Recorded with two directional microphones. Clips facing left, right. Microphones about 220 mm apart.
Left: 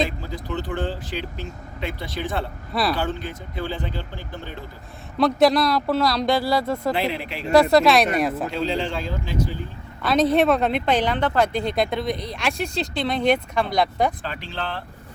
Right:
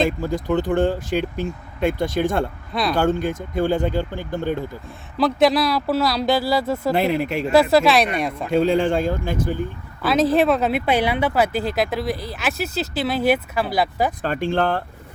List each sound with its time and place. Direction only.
0.2 s speech: 50° right (ahead or behind)
5.1 s speech: centre (ahead or behind)
7.1 s speech: 45° right (ahead or behind)
7.5 s speech: centre (ahead or behind)
8.4 s speech: 50° right (ahead or behind)
10.0 s speech: 5° right (ahead or behind)
14.2 s speech: 50° right (ahead or behind)